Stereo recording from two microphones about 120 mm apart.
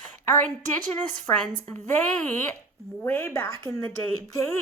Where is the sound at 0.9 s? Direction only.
10° left (ahead or behind).